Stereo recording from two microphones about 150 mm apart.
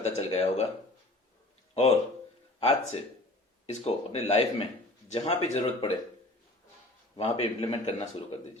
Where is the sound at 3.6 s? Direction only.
45° left (ahead or behind).